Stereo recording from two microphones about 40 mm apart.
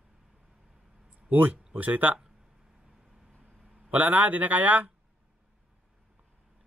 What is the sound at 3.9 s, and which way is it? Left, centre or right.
Speech, right.